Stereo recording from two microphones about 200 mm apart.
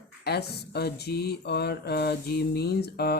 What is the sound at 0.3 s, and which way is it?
Mantra, 55° left (ahead or behind).